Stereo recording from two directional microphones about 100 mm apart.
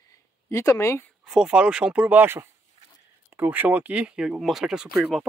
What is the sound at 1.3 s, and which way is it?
Speech, 10° right (ahead or behind).